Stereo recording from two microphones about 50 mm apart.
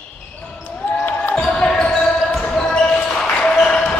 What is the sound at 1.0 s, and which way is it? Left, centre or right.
Basketball bounce, left.